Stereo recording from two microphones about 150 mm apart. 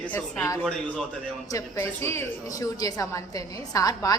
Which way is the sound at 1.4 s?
20° left (ahead or behind).